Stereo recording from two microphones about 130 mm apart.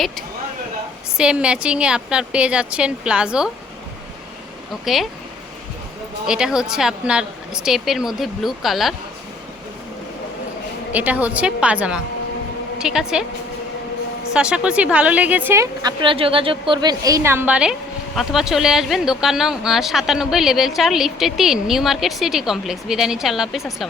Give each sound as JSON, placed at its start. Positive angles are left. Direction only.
{"t": 1.1, "sound": "a woman's voice", "side_deg": -5}
{"t": 4.9, "sound": "speech", "side_deg": 0}
{"t": 6.2, "sound": "speech", "side_deg": -5}
{"t": 10.9, "sound": "a woman's voice", "side_deg": -10}
{"t": 14.3, "sound": "a woman's voice", "side_deg": -10}